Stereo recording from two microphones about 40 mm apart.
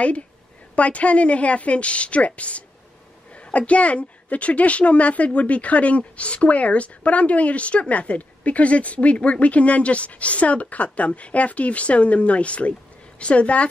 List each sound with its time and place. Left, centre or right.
0.7 s a woman's voice: left